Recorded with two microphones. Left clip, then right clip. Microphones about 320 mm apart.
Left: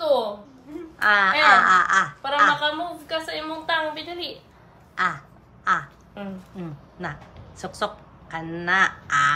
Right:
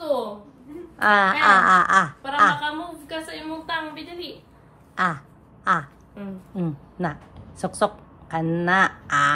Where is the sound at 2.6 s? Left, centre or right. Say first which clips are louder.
Left 3 dB; left.